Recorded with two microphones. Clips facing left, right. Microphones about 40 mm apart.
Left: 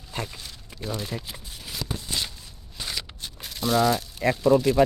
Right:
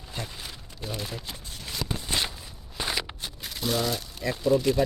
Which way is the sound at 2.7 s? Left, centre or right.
Right.